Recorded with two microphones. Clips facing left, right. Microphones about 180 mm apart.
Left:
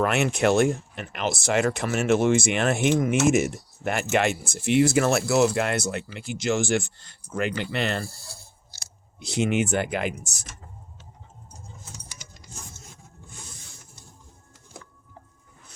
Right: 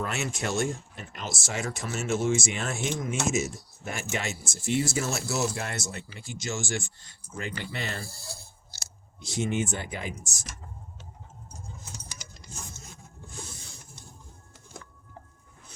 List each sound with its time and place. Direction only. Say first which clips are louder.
0.0 s speech: left 10 dB; 65° left (ahead or behind)
7.3 s speech: left 8 dB; 75° left (ahead or behind)
9.2 s speech: left 5 dB; 70° left (ahead or behind)